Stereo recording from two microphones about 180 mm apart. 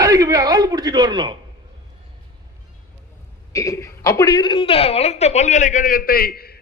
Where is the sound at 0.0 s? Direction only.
20° right (ahead or behind).